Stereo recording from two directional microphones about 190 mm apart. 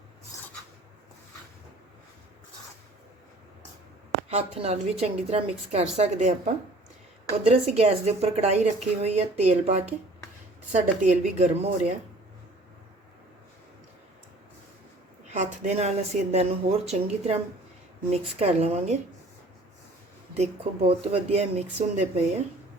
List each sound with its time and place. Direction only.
4.3 s a woman's voice: 35° right (ahead or behind)
15.3 s a woman's voice: 35° right (ahead or behind)
20.3 s a woman's voice: 35° right (ahead or behind)